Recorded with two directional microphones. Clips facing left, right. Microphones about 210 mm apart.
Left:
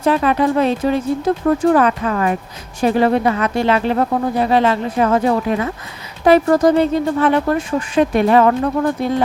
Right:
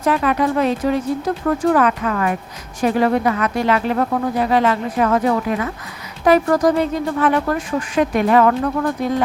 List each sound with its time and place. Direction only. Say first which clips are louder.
0.0 s speech: left 2 dB; 30° left (ahead or behind)